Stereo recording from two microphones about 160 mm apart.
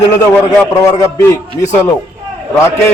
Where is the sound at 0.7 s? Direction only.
20° left (ahead or behind).